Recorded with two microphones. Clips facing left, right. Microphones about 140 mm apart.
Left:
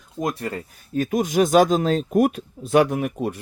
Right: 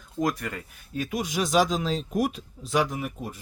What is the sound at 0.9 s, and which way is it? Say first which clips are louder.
Speech: left 9 dB; 45° left (ahead or behind).